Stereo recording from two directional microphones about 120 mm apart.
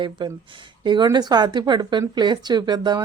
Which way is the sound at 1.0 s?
35° right (ahead or behind).